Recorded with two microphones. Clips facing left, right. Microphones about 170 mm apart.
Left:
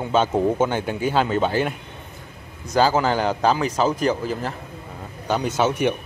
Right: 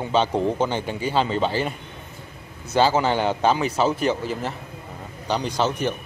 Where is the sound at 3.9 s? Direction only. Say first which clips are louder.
Left 1 dB; 40° left (ahead or behind).